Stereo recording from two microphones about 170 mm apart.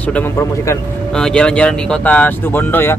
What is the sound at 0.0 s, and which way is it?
Speech, 10° left (ahead or behind).